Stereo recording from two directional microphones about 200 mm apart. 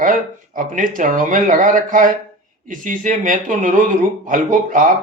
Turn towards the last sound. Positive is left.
turn(degrees=-40)  # may be behind; listen again after turning